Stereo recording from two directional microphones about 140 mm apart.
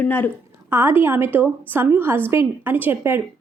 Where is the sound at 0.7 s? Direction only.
15° right (ahead or behind).